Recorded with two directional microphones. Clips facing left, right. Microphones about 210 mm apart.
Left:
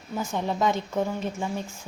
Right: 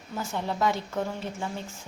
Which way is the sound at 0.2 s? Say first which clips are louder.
Left 2 dB; 15° left (ahead or behind).